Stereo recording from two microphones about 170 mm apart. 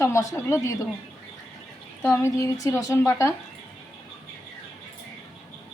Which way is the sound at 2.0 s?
15° left (ahead or behind).